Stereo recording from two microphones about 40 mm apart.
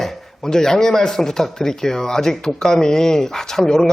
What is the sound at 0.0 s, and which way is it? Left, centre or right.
Speech, centre.